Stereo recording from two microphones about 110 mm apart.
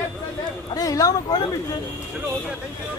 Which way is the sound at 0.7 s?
35° left (ahead or behind).